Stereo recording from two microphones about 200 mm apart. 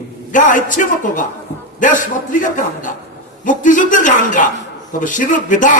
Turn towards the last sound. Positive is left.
turn(degrees=40)  # may be behind; listen again after turning